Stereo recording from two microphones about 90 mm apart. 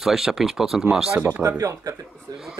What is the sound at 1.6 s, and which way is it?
Speech, 40° right (ahead or behind).